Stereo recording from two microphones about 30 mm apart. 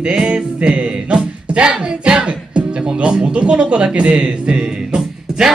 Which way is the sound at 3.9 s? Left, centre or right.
Right.